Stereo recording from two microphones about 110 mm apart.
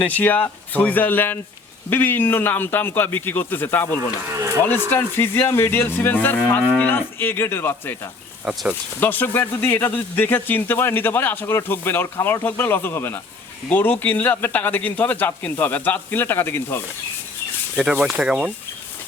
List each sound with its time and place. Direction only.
0.2 s a man's voice: 15° left (ahead or behind)
8.5 s speech: 5° right (ahead or behind)
9.0 s a man's voice: 20° left (ahead or behind)
17.7 s speech: 10° right (ahead or behind)